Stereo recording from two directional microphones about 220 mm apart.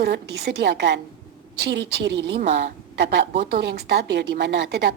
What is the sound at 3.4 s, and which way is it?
A woman's voice, 50° right (ahead or behind).